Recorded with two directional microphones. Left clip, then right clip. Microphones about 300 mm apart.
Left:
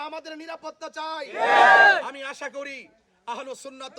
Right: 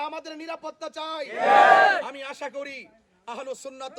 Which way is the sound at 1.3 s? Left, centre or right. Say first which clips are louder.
Even; left.